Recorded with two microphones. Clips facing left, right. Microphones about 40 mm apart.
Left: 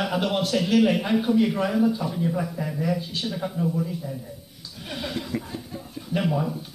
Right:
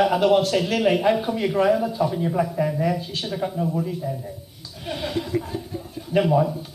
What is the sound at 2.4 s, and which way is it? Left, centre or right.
Speech, right.